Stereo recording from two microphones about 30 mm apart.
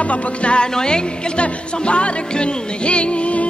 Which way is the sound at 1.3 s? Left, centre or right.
Left.